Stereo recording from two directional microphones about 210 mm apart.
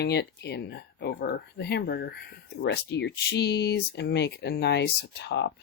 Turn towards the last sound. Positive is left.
turn(degrees=55)  # may be behind; listen again after turning